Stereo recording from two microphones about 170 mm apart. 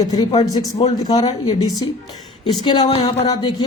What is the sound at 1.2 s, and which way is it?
Speech, 25° left (ahead or behind).